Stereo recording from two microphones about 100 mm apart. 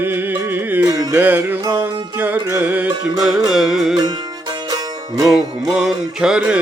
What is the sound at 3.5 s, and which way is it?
Music, 5° right (ahead or behind).